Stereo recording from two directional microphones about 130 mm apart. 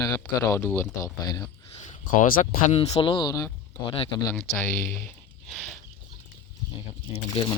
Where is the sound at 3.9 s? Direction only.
45° left (ahead or behind).